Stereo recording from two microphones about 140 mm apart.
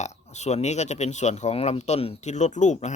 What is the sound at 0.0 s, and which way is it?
Speech, 55° left (ahead or behind).